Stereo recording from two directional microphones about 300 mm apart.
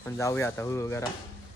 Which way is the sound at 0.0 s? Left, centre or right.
Centre.